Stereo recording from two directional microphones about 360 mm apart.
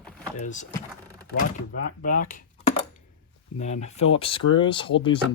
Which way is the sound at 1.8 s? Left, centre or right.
Left.